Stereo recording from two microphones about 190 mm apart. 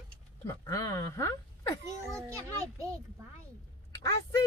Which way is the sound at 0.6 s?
20° left (ahead or behind).